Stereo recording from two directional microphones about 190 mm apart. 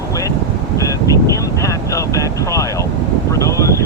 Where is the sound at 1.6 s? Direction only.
15° left (ahead or behind).